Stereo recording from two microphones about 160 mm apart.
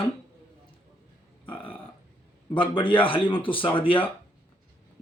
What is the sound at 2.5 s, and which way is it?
Speech, 30° left (ahead or behind).